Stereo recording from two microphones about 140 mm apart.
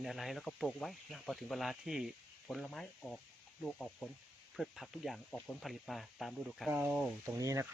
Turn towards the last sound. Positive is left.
turn(degrees=-25)  # may be behind; listen again after turning